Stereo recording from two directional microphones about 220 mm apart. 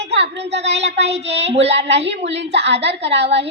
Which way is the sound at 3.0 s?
50° right (ahead or behind).